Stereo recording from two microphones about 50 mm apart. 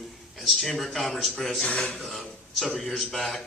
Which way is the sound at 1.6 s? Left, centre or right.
Centre.